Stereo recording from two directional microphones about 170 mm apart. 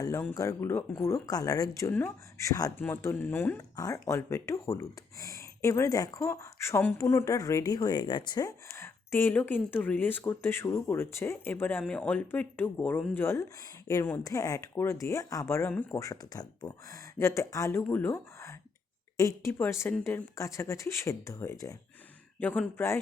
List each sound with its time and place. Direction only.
0.3 s speech: 15° left (ahead or behind)